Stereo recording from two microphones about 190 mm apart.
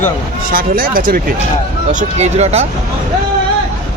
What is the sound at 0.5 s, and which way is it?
Speech, 50° right (ahead or behind).